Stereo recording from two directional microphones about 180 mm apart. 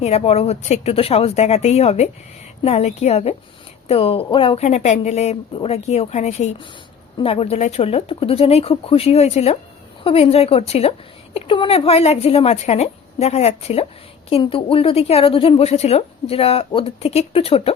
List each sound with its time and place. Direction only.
0.0 s a woman's voice: 35° left (ahead or behind)